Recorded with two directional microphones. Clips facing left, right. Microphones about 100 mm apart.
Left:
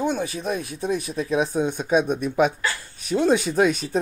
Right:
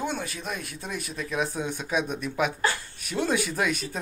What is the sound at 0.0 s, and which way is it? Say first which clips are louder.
Speech: left 7 dB; 20° left (ahead or behind).